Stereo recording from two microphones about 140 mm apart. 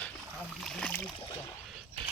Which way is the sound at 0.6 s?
5° left (ahead or behind).